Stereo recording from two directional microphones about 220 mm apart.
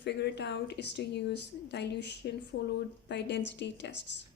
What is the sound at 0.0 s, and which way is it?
A woman's voice, 50° left (ahead or behind).